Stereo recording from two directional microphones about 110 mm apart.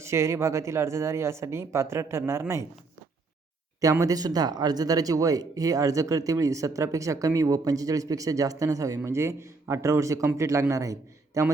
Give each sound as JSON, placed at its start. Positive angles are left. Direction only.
{"t": 0.0, "sound": "speech", "side_deg": -25}
{"t": 4.0, "sound": "speech", "side_deg": -35}